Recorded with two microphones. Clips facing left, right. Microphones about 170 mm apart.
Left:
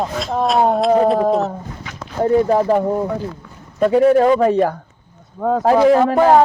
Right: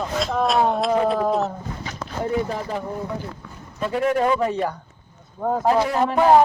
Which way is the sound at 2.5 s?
60° left (ahead or behind).